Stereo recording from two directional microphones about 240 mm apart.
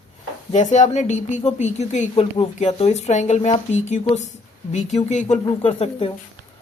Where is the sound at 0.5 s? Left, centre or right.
Left.